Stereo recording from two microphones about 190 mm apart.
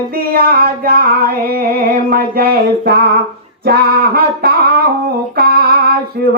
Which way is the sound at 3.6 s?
55° right (ahead or behind).